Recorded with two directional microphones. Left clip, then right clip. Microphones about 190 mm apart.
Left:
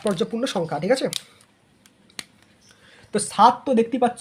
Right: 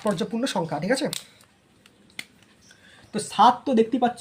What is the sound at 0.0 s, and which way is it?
Speech, 25° left (ahead or behind).